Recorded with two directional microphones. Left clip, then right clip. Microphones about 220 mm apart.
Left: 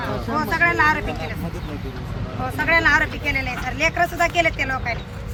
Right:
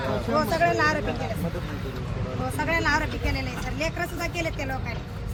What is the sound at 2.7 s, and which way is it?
Speech, 30° right (ahead or behind).